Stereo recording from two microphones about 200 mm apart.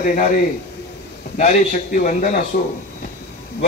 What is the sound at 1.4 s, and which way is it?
A man's voice, 40° left (ahead or behind).